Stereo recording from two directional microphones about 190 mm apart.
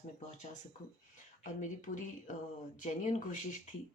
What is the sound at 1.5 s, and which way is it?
Speech, 45° left (ahead or behind).